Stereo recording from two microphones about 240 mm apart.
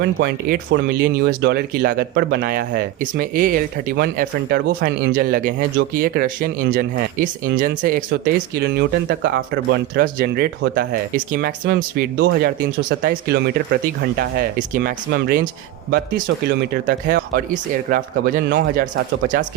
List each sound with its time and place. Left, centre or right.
0.0 s speech: right